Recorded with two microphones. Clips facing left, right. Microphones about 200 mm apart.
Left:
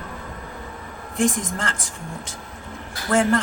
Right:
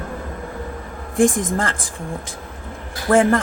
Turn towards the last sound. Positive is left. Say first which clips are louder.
# right 4 dB
turn(degrees=-55)  # may be behind; listen again after turning